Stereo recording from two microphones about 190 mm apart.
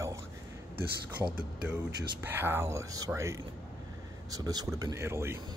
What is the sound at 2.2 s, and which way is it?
Speech, 10° right (ahead or behind).